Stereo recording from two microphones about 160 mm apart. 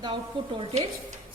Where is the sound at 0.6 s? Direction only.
35° right (ahead or behind).